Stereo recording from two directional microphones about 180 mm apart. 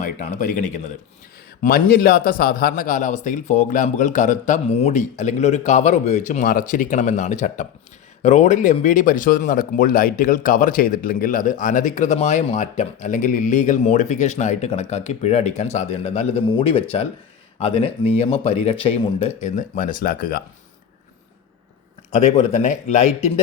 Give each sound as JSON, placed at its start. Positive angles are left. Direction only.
{"t": 0.0, "sound": "speech", "side_deg": 45}
{"t": 1.6, "sound": "speech", "side_deg": 55}
{"t": 19.4, "sound": "speech", "side_deg": 45}
{"t": 22.1, "sound": "speech", "side_deg": 40}